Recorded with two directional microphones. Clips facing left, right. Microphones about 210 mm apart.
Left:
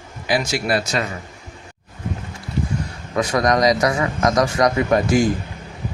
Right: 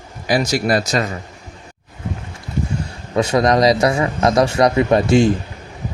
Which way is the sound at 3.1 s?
25° right (ahead or behind).